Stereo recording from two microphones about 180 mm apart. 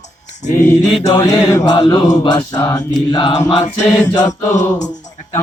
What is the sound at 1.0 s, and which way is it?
Speech, 15° left (ahead or behind).